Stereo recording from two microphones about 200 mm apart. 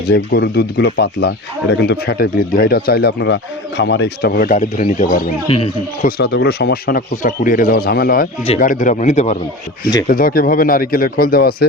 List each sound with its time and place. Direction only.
0.0 s speech: 55° left (ahead or behind); by 6.1 s 30° left (ahead or behind)
6.1 s speech: 50° left (ahead or behind); by 9.4 s 35° left (ahead or behind)
10.1 s speech: 45° left (ahead or behind)